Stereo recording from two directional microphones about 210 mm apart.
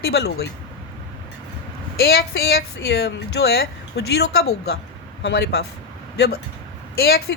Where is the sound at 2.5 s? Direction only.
50° left (ahead or behind).